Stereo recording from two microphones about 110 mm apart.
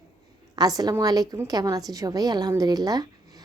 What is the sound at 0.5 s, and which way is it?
A woman's voice, 35° right (ahead or behind).